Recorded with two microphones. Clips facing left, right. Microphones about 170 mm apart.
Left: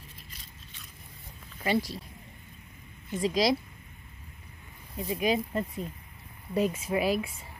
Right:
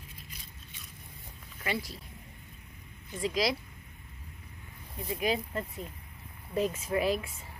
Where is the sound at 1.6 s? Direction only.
30° left (ahead or behind).